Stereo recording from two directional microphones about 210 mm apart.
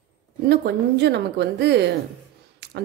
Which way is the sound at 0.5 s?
55° right (ahead or behind).